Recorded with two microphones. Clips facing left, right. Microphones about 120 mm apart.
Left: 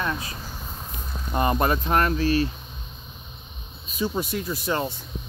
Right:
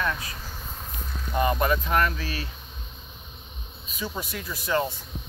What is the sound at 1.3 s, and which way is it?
Speech, 40° left (ahead or behind).